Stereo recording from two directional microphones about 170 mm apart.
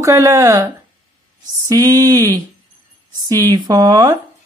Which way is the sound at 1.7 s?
20° right (ahead or behind).